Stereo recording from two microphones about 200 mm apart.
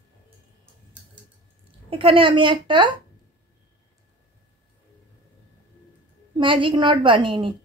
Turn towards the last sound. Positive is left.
turn(degrees=-25)  # may be behind; listen again after turning